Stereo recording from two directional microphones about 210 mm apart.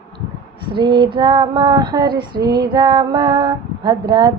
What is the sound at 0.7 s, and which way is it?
Female singing, 20° right (ahead or behind).